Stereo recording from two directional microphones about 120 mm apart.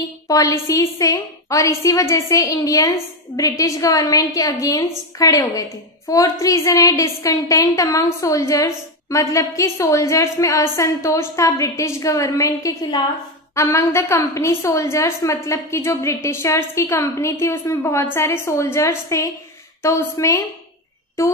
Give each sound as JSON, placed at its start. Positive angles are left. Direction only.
{"t": 0.3, "sound": "a woman's voice", "side_deg": 25}